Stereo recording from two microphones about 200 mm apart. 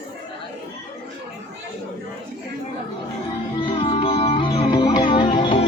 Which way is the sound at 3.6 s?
30° left (ahead or behind).